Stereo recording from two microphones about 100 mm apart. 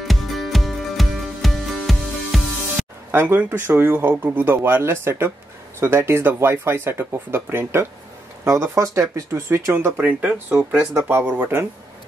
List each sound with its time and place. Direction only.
0.0 s music: centre (ahead or behind)
3.1 s speech: 25° right (ahead or behind)